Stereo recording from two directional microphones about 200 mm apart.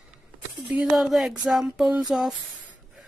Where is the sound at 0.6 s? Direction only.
Centre (ahead or behind).